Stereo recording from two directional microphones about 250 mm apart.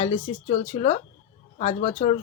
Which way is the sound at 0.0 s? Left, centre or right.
Left.